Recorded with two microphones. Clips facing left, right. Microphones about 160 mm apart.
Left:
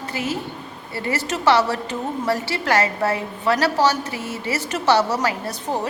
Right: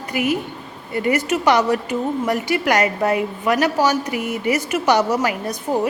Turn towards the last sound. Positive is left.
turn(degrees=-15)  # may be behind; listen again after turning